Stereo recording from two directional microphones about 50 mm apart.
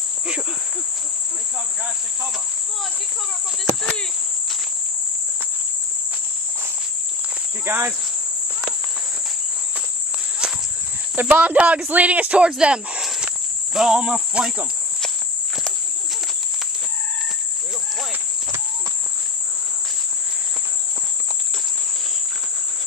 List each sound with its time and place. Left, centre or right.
7.6 s speech: right
10.4 s a sound: centre
11.1 s speech: right